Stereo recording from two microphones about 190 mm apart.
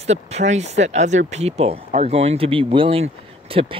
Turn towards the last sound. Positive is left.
turn(degrees=-30)  # may be behind; listen again after turning